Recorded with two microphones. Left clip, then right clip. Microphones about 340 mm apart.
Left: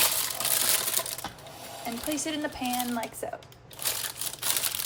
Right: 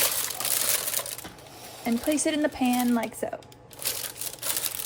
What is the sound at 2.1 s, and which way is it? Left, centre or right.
Speech, right.